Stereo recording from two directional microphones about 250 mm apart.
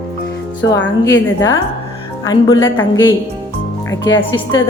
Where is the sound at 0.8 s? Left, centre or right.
Left.